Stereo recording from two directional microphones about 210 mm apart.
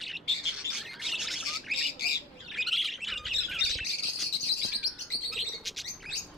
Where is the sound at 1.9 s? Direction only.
50° left (ahead or behind).